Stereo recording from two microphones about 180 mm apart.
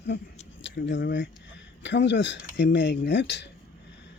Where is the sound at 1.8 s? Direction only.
80° left.